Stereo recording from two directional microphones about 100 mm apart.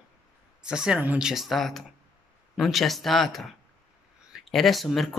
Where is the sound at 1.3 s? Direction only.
Centre (ahead or behind).